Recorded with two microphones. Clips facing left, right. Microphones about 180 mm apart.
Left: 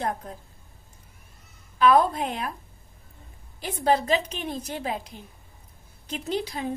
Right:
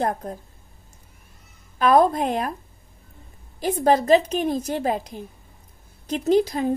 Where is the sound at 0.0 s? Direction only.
40° right (ahead or behind).